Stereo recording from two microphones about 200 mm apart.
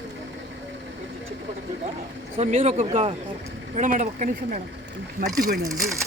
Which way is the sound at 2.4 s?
35° right (ahead or behind).